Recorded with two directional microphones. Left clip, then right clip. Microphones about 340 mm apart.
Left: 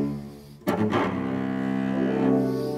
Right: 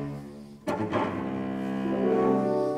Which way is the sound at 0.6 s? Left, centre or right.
Left.